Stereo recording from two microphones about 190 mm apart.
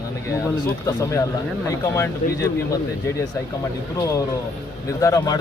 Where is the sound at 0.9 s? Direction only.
15° left (ahead or behind).